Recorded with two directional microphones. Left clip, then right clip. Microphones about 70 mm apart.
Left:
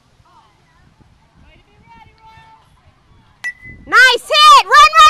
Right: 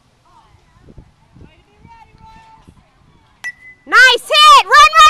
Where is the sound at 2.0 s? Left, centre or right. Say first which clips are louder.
Even; centre.